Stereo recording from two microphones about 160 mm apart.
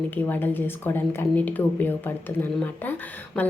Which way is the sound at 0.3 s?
10° left (ahead or behind).